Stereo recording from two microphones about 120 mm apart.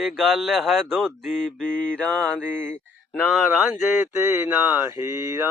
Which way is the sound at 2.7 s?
10° left (ahead or behind).